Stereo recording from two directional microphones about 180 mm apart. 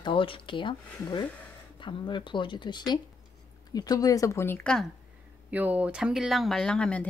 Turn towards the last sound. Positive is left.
turn(degrees=5)  # may be behind; listen again after turning